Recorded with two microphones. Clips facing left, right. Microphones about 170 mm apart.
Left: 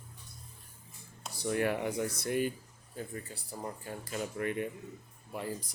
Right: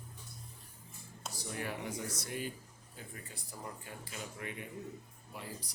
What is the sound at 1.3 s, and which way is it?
Speech, 65° left (ahead or behind).